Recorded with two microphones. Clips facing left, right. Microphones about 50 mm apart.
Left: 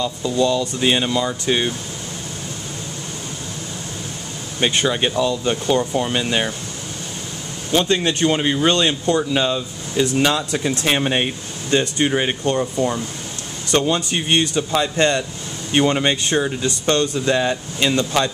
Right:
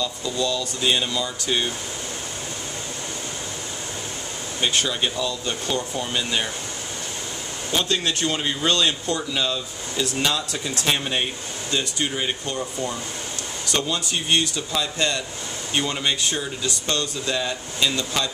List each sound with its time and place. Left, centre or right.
0.0 s speech: left
4.6 s speech: left
7.7 s speech: left